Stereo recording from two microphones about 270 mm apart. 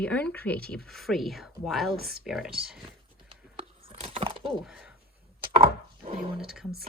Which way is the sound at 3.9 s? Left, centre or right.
Right.